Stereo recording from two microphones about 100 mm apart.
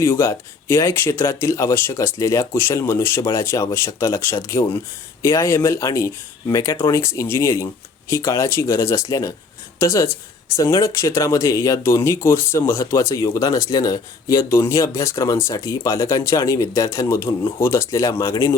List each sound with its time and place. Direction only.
0.0 s speech: 25° left (ahead or behind)